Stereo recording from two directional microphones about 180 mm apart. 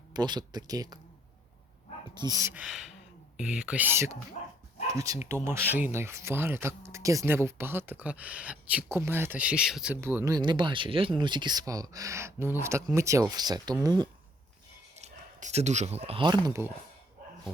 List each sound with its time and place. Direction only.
0.1 s speech: 25° right (ahead or behind)
2.1 s speech: 20° right (ahead or behind)
2.5 s speech: 5° right (ahead or behind); by 14.1 s 25° right (ahead or behind)
14.9 s speech: 40° right (ahead or behind)